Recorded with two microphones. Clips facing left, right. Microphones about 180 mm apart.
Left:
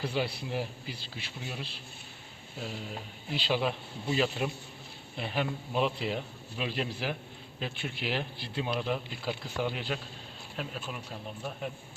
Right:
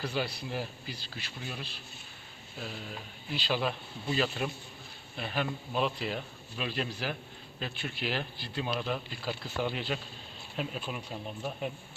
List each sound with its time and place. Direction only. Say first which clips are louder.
0.0 s speech: left 2 dB; 25° left (ahead or behind)
10.6 s speech: right 2 dB; 10° right (ahead or behind)